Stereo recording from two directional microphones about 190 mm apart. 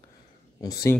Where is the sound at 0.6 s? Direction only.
20° left (ahead or behind).